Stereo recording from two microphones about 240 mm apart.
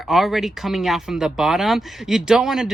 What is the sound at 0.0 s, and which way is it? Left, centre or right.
Speech, centre.